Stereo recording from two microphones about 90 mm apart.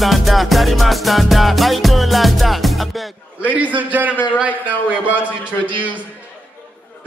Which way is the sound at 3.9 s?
15° right (ahead or behind).